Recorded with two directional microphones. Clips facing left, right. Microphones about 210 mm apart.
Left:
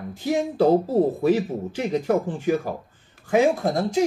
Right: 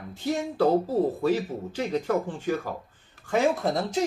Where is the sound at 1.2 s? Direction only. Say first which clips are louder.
Left 4 dB; 15° left (ahead or behind).